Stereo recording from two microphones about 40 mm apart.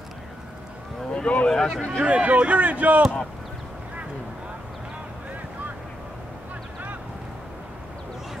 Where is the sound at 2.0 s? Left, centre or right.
Right.